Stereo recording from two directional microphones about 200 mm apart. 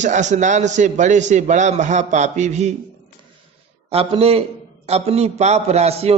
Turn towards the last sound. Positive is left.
turn(degrees=-30)  # may be behind; listen again after turning